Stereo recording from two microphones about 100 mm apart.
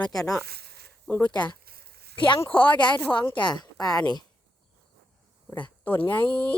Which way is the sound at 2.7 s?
45° left (ahead or behind).